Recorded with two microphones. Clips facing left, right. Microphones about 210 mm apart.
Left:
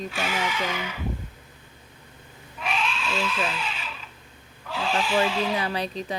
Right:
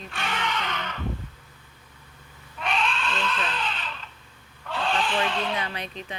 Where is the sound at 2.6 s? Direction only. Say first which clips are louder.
Right 1 dB; 5° left (ahead or behind).